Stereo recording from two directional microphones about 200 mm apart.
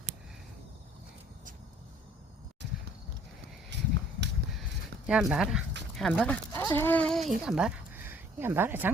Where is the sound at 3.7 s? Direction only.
60° right (ahead or behind).